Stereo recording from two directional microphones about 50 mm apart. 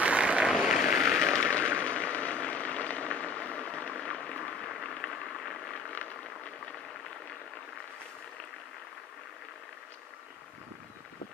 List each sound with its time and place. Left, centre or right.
0.0 s vehicle: right
0.5 s vehicle: centre; by 3.9 s left
4.0 s a sound: centre